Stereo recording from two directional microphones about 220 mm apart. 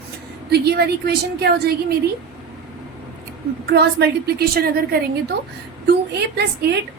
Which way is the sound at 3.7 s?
45° right (ahead or behind).